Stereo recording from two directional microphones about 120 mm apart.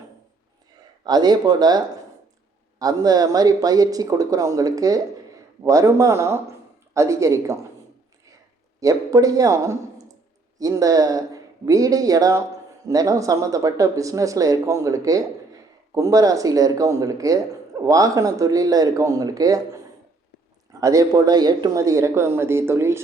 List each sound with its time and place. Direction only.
1.0 s speech: 35° right (ahead or behind)
8.8 s speech: 30° right (ahead or behind)
20.8 s speech: 30° right (ahead or behind)